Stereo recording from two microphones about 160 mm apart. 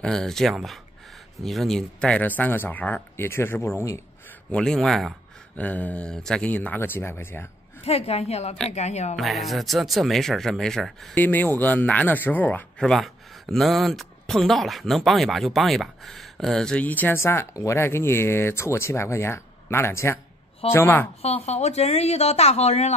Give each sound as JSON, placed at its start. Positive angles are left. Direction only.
{"t": 0.0, "sound": "speech", "side_deg": 5}
{"t": 4.5, "sound": "speech", "side_deg": 5}
{"t": 7.8, "sound": "speech", "side_deg": 40}
{"t": 9.1, "sound": "speech", "side_deg": 0}
{"t": 21.2, "sound": "speech", "side_deg": 40}